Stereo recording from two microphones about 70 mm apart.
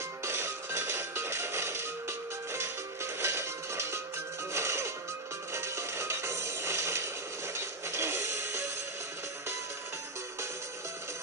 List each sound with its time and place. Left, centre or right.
0.2 s music: right